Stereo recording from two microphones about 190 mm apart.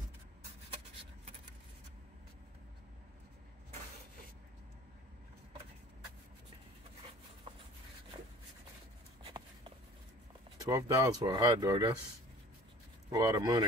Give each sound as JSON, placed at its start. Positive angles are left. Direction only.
{"t": 10.6, "sound": "speech", "side_deg": -15}
{"t": 13.1, "sound": "speech", "side_deg": -20}